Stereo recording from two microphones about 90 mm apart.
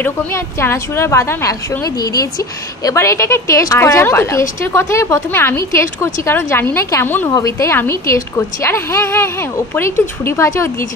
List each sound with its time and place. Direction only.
0.0 s a woman's voice: 25° left (ahead or behind)
2.8 s a woman's voice: 35° left (ahead or behind)